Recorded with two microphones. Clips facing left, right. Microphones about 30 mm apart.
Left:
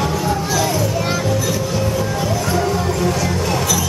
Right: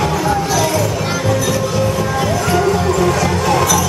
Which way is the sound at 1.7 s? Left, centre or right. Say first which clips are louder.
Right 3 dB; right.